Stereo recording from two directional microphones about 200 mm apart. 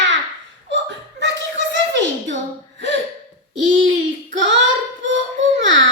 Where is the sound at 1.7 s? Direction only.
65° right (ahead or behind).